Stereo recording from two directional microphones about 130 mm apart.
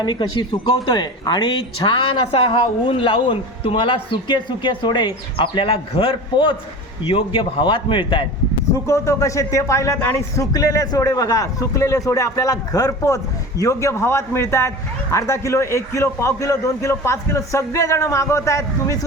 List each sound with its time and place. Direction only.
0.0 s speech: 35° left (ahead or behind)
8.9 s speech: 25° left (ahead or behind)